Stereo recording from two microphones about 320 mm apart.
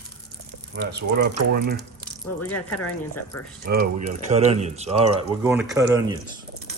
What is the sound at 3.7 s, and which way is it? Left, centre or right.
Speech, right.